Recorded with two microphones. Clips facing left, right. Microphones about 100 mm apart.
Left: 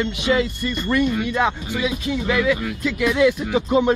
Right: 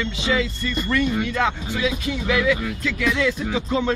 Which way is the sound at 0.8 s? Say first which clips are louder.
Left 2 dB; 10° left (ahead or behind).